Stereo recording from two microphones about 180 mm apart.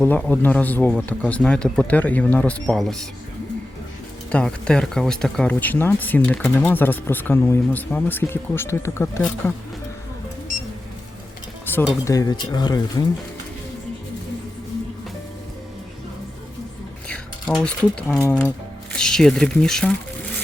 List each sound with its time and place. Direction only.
0.0 s speech: 10° left (ahead or behind)
4.3 s speech: 5° left (ahead or behind)
11.6 s speech: 10° left (ahead or behind)
17.1 s a sound: 5° left (ahead or behind)
18.2 s speech: 10° left (ahead or behind)